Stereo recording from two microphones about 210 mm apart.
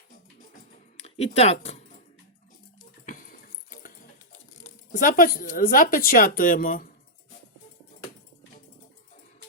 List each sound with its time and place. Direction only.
0.9 s speech: 30° left (ahead or behind)
3.1 s a sound: 40° left (ahead or behind)
4.6 s speech: 40° left (ahead or behind)